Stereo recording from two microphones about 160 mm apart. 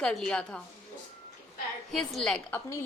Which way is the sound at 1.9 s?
Centre (ahead or behind).